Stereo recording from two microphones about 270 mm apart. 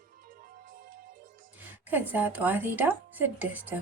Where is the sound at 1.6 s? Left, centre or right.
Centre.